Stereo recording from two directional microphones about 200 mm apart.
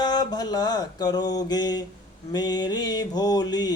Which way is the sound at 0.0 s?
20° left (ahead or behind).